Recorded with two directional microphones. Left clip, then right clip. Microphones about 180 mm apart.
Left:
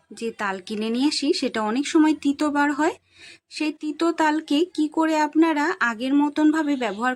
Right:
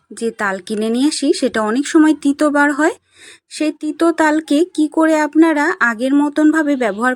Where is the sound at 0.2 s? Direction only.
20° right (ahead or behind).